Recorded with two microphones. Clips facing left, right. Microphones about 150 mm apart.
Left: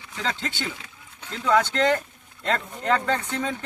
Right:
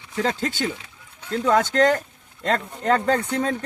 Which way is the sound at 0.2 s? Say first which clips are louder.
Right 6 dB; 45° right (ahead or behind).